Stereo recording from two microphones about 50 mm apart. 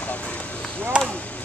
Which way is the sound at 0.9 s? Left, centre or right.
Centre.